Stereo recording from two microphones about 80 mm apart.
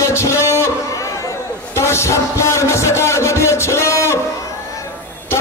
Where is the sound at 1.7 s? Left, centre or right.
Left.